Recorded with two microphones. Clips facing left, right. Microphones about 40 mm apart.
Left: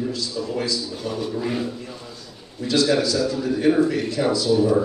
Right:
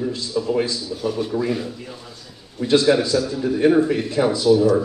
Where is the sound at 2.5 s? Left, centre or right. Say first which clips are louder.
Right 3 dB; right.